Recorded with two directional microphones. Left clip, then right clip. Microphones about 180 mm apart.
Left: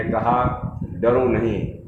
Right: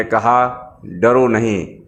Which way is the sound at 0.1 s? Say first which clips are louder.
Right 6 dB; 30° right (ahead or behind).